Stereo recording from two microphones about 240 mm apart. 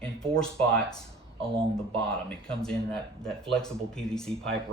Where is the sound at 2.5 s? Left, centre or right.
Centre.